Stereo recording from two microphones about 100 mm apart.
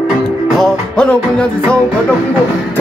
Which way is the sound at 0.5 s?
5° left (ahead or behind).